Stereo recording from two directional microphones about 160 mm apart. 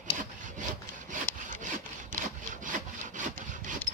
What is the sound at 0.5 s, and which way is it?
Sawing, 50° right (ahead or behind).